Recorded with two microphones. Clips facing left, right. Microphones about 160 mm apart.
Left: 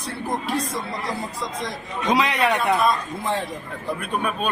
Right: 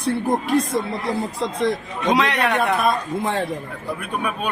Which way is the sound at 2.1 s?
Centre (ahead or behind).